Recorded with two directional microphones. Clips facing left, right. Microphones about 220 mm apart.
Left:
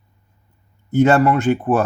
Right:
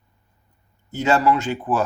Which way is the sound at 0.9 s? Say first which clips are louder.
Left 5 dB; 55° left (ahead or behind).